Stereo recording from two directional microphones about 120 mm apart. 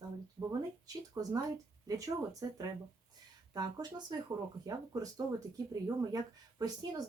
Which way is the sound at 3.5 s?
35° right (ahead or behind).